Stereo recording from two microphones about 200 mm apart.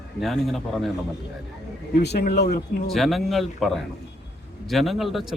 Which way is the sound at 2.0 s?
55° left (ahead or behind).